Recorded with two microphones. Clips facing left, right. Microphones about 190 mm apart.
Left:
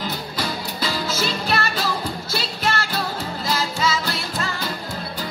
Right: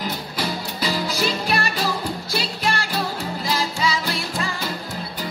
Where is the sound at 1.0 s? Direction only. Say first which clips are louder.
Right 1 dB; 15° right (ahead or behind).